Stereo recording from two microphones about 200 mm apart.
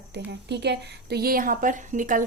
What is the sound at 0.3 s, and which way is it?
A woman's voice, 55° right (ahead or behind).